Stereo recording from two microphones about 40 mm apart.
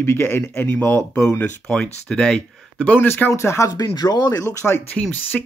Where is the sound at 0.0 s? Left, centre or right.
Left.